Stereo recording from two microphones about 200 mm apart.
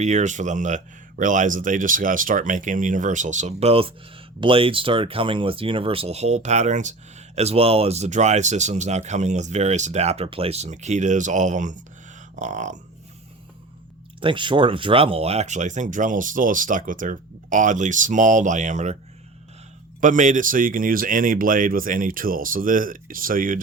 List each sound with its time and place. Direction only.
0.0 s speech: 35° right (ahead or behind)
14.2 s speech: 25° right (ahead or behind)
20.0 s speech: 40° right (ahead or behind)